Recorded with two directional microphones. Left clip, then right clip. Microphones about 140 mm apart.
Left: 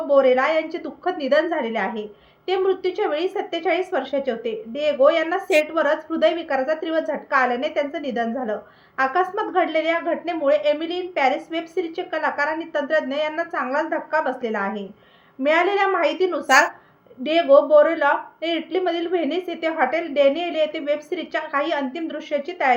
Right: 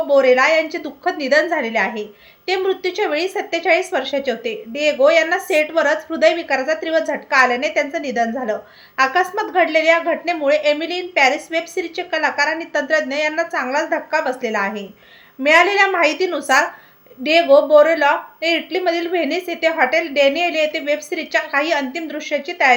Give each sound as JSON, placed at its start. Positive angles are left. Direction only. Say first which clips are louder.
{"t": 0.1, "sound": "a woman's voice", "louder": "right 3 dB", "side_deg": -25}
{"t": 16.5, "sound": "speech", "louder": "even", "side_deg": 0}
{"t": 17.2, "sound": "a woman's voice", "louder": "right 3 dB", "side_deg": -25}